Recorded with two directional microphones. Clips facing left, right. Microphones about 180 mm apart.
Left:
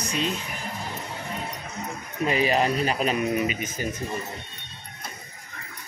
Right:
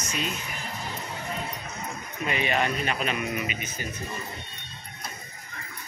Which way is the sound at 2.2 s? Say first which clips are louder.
Left 4 dB; 35° left (ahead or behind).